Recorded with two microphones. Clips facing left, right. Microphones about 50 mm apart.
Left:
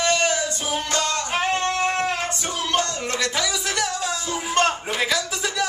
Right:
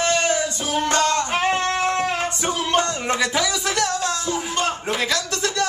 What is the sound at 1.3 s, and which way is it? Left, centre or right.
Music, centre.